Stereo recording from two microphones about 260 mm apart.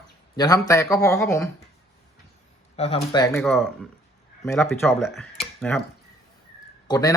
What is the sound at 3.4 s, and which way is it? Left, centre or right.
Speech, centre.